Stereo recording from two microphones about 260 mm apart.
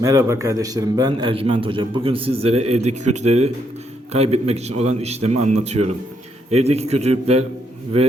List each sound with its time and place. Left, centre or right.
0.0 s a man's voice: centre